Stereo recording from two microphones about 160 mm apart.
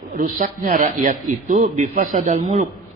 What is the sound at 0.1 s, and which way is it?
A man's voice, 55° right (ahead or behind).